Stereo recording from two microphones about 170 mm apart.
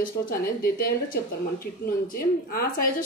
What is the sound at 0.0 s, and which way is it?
Speech, 60° left (ahead or behind).